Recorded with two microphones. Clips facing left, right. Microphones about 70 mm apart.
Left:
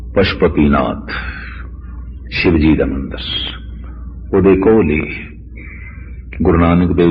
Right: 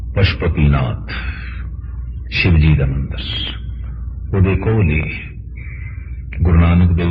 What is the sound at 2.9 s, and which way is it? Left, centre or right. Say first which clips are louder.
A man's voice: left 4 dB; left.